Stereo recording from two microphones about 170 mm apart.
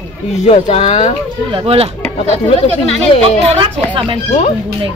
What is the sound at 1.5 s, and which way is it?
Speech, 30° right (ahead or behind).